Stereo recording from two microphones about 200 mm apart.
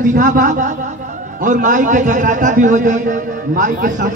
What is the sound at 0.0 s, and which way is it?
A man's voice, 40° right (ahead or behind).